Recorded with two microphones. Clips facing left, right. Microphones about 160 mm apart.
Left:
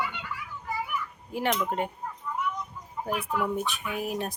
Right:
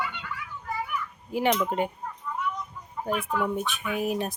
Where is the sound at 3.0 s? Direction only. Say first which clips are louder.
Right 2 dB; 5° left (ahead or behind).